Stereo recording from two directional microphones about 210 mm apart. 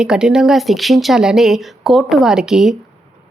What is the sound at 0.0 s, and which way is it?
Speech, 5° right (ahead or behind).